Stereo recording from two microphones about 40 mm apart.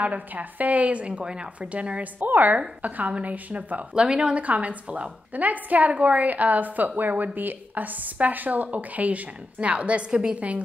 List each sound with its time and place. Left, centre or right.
0.0 s a woman's voice: right
1.2 s a woman's voice: right
1.6 s a woman's voice: right
2.1 s a woman's voice: right
3.9 s a woman's voice: right
4.4 s a woman's voice: right